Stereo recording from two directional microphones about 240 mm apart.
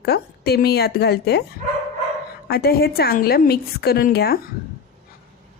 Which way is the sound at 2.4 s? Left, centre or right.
Left.